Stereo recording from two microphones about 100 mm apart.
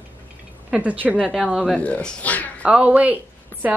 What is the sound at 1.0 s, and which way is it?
Speech, 10° right (ahead or behind).